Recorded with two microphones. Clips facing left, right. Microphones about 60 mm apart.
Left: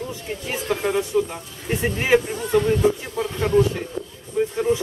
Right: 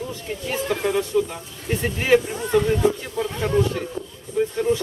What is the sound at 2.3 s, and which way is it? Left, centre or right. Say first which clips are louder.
Speech: even; centre.